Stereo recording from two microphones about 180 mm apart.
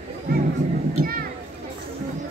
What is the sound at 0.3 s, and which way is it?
Music, 55° right (ahead or behind).